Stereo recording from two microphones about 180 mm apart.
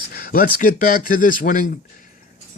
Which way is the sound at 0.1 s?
55° left (ahead or behind).